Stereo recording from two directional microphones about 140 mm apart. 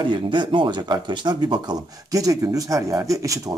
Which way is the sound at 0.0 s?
35° right (ahead or behind).